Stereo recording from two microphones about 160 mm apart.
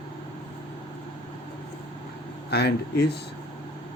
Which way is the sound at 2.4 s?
90° left.